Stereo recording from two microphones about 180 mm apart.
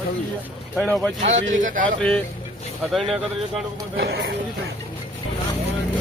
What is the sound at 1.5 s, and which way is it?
Speech, 45° right (ahead or behind).